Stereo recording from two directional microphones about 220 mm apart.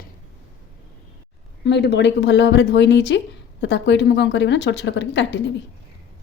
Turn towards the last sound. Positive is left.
turn(degrees=55)  # may be behind; listen again after turning